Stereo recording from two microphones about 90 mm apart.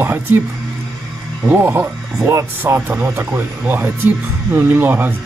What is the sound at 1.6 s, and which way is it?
Speech, 30° right (ahead or behind).